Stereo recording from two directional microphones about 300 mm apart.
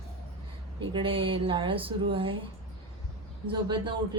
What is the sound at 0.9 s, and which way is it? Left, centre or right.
Speech, centre.